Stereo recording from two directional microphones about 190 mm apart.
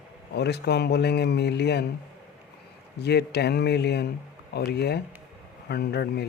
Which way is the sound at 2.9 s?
60° left (ahead or behind).